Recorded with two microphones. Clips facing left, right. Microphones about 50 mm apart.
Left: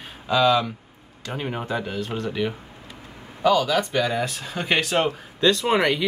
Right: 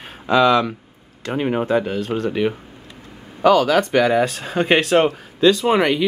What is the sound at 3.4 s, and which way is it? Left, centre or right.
Speech, right.